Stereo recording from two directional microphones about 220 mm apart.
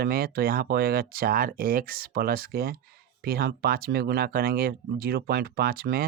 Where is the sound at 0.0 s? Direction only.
45° right (ahead or behind).